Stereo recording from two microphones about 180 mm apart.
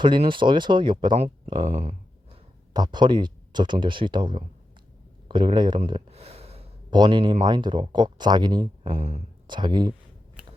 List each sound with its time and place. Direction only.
0.0 s speech: 25° right (ahead or behind)
2.7 s speech: 25° right (ahead or behind)
8.8 s speech: 40° right (ahead or behind)
9.5 s speech: 25° right (ahead or behind)